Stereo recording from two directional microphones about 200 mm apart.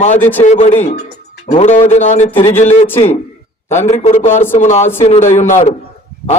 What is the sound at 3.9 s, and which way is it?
Speech, 30° left (ahead or behind).